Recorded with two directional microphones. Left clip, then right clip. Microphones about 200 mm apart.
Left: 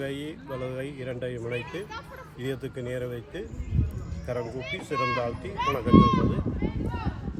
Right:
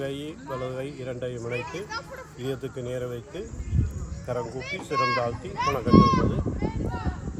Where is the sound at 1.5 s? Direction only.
40° right (ahead or behind).